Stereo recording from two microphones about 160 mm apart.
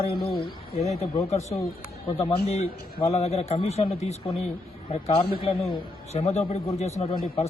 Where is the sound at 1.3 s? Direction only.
40° left (ahead or behind).